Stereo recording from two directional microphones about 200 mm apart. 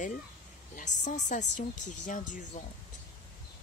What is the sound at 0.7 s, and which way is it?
Speech, 35° left (ahead or behind).